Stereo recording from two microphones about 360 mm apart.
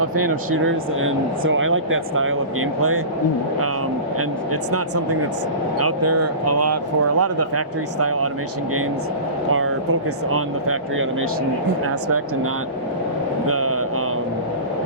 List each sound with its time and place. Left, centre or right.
0.5 s speech: right
5.8 s speech: right
9.5 s speech: right
13.5 s a sound: right